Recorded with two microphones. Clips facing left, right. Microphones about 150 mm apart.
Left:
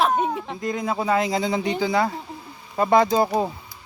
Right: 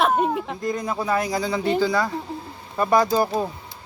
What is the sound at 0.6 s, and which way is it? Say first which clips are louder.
Speech: left 4 dB; 20° left (ahead or behind).